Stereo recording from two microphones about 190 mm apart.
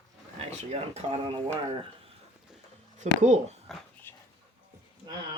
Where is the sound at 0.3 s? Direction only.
35° right (ahead or behind).